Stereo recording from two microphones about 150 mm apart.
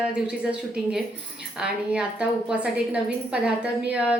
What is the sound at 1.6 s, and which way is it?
A woman's voice, 5° right (ahead or behind).